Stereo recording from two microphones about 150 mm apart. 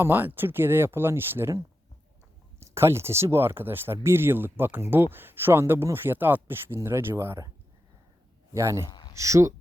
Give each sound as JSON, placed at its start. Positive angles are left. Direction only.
{"t": 0.0, "sound": "speech", "side_deg": -15}
{"t": 8.5, "sound": "speech", "side_deg": -20}
{"t": 8.9, "sound": "a sound", "side_deg": 30}
{"t": 9.1, "sound": "speech", "side_deg": -20}